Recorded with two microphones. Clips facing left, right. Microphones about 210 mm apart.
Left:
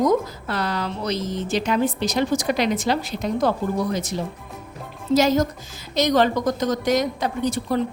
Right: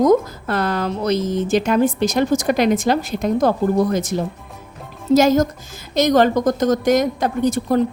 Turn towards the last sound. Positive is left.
turn(degrees=-45)  # may be behind; listen again after turning